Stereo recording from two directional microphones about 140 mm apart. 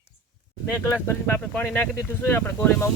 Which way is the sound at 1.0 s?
15° left (ahead or behind).